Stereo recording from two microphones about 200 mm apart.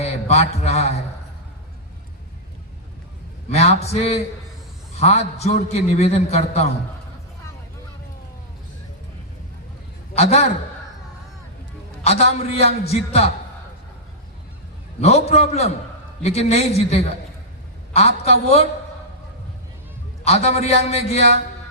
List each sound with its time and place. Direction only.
0.0 s a man's voice: 30° left (ahead or behind)
3.5 s a man's voice: 30° left (ahead or behind)
10.2 s a man's voice: 30° left (ahead or behind)
12.0 s a man's voice: 30° left (ahead or behind)
15.0 s a man's voice: 30° left (ahead or behind)
20.2 s a man's voice: 30° left (ahead or behind)